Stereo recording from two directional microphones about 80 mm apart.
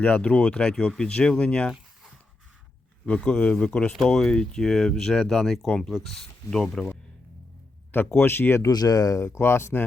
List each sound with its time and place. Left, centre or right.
0.0 s speech: centre
3.1 s speech: centre
7.9 s speech: left
8.6 s speech: left